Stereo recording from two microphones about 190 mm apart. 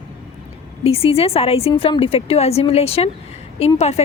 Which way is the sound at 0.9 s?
30° left (ahead or behind).